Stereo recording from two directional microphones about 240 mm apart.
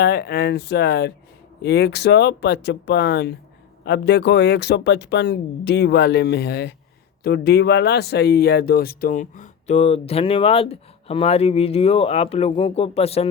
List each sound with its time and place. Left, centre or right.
0.0 s speech: left